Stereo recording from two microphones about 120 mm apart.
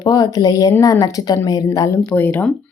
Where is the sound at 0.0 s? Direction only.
30° left (ahead or behind).